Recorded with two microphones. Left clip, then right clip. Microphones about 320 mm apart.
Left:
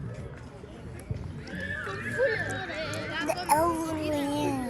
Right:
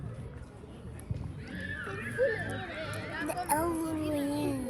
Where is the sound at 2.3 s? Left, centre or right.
Left.